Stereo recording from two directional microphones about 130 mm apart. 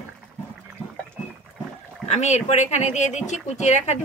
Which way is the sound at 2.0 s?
60° left (ahead or behind).